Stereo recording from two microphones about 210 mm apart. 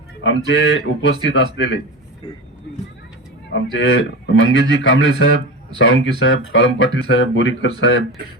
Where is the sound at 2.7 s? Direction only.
55° left (ahead or behind).